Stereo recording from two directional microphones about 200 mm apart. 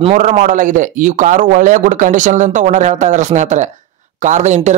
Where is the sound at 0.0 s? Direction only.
40° right (ahead or behind).